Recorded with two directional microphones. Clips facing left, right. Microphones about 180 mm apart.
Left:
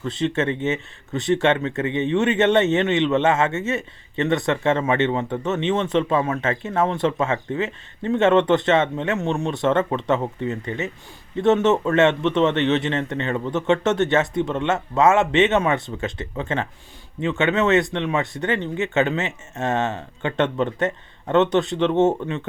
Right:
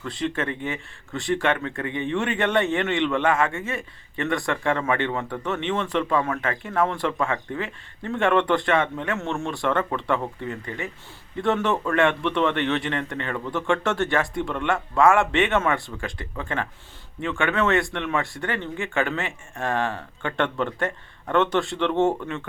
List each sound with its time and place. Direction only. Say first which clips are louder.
0.0 s speech: left 5 dB; 20° left (ahead or behind)